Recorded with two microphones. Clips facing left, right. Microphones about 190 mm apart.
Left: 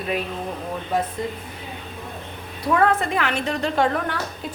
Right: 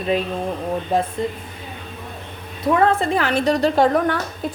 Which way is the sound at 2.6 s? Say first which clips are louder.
Right 3 dB; 30° right (ahead or behind).